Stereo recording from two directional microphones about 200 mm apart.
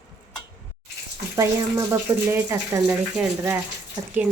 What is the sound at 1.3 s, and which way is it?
A woman's voice, 15° right (ahead or behind).